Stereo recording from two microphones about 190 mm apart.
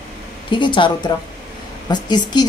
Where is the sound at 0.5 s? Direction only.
25° left (ahead or behind).